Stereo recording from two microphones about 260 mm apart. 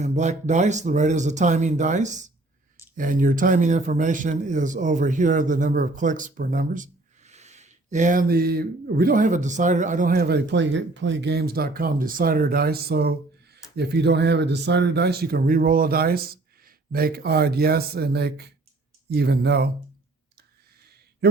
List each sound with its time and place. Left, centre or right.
0.0 s speech: right